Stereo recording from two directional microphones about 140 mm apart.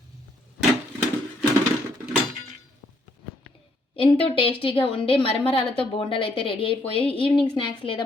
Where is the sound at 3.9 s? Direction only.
40° left (ahead or behind).